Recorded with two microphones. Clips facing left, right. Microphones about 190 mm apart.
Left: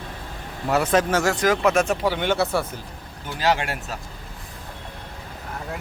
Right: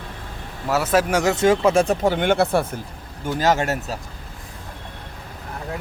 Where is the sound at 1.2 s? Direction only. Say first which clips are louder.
Right 3 dB; 20° right (ahead or behind).